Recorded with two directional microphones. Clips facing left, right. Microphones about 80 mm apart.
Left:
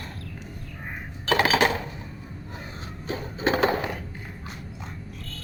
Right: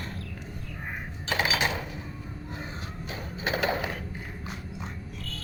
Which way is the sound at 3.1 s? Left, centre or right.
Left.